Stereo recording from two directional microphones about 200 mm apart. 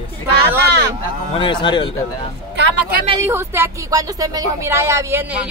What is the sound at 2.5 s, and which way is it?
Speech, 60° right (ahead or behind).